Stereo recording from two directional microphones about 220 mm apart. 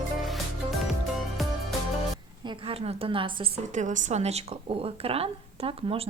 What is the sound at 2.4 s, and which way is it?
A woman's voice, 20° right (ahead or behind).